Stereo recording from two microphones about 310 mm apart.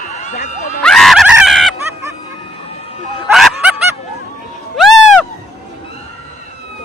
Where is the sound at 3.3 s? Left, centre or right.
Centre.